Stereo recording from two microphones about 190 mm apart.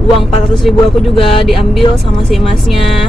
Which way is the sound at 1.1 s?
30° left (ahead or behind).